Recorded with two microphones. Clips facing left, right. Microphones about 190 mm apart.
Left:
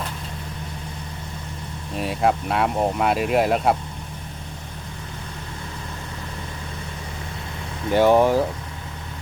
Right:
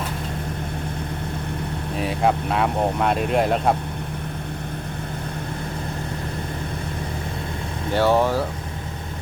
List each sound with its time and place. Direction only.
2.0 s speech: centre (ahead or behind)
7.9 s speech: 15° left (ahead or behind)